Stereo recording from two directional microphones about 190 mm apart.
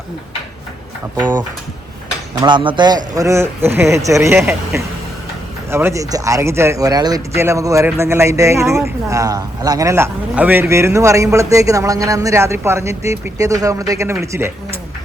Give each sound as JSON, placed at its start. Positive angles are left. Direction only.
{"t": 2.4, "sound": "speech", "side_deg": -25}